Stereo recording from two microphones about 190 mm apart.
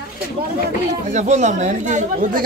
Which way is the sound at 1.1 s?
35° right (ahead or behind).